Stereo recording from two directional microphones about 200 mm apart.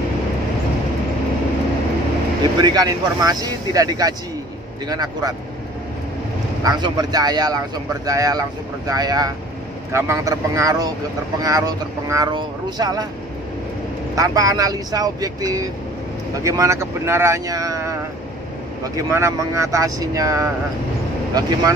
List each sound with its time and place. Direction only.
2.6 s speech: 20° right (ahead or behind)
6.6 s speech: 20° right (ahead or behind)
14.1 s speech: 15° right (ahead or behind)
18.9 s speech: 15° right (ahead or behind)